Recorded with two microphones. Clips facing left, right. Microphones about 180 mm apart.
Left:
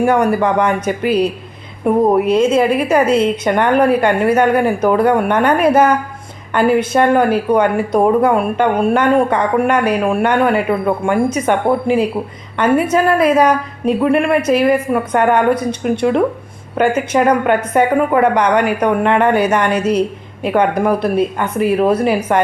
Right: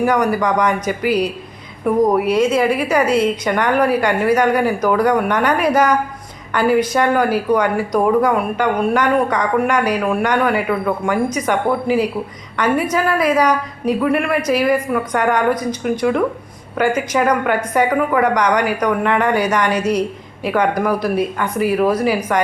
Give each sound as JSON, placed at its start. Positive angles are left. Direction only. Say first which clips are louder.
{"t": 0.0, "sound": "speech", "louder": "left 3 dB", "side_deg": 25}